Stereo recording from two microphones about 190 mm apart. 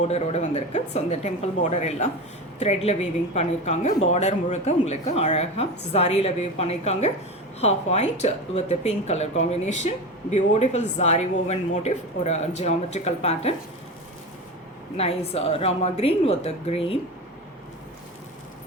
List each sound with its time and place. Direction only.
0.0 s a woman's voice: 35° left (ahead or behind)
14.9 s a woman's voice: 30° left (ahead or behind)